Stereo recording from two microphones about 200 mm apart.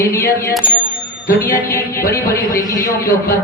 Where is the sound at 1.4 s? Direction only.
15° left (ahead or behind).